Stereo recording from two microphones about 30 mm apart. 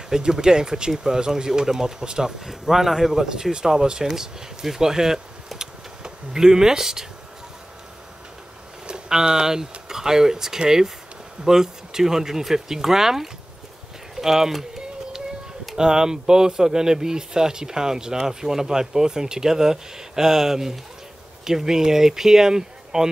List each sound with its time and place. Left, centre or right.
0.1 s speech: right
2.4 s speech: centre
3.2 s speech: right
5.6 s a sound: right
8.8 s speech: right
15.7 s speech: right